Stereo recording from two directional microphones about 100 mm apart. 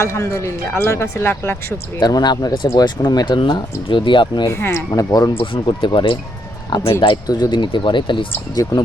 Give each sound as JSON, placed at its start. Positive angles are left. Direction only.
{"t": 0.0, "sound": "speech", "side_deg": 25}
{"t": 2.0, "sound": "speech", "side_deg": 40}
{"t": 4.4, "sound": "speech", "side_deg": 30}
{"t": 5.4, "sound": "speech", "side_deg": 60}
{"t": 7.3, "sound": "speech", "side_deg": 40}
{"t": 8.6, "sound": "speech", "side_deg": 40}